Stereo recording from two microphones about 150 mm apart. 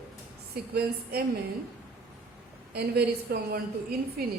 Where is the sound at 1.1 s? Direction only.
90° right.